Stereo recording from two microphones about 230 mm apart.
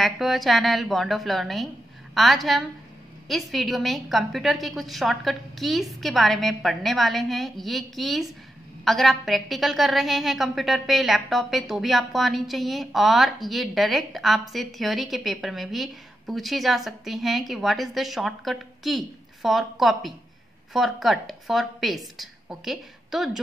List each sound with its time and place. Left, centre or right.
0.0 s a woman's voice: centre